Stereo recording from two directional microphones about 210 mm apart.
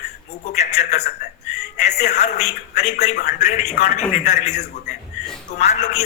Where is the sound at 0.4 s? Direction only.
30° left (ahead or behind).